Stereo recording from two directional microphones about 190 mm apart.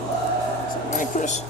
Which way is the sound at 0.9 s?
40° left (ahead or behind).